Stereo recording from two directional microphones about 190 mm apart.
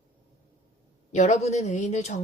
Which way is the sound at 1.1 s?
40° left (ahead or behind).